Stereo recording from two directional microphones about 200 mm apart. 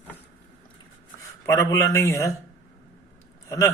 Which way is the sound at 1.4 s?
15° left (ahead or behind).